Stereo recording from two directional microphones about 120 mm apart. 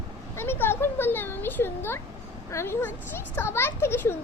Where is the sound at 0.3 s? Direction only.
20° left (ahead or behind).